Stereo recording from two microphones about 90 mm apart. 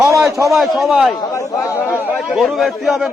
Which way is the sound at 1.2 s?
35° left (ahead or behind).